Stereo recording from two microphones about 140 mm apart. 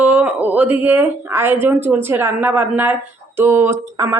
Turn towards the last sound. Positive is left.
turn(degrees=-15)  # may be behind; listen again after turning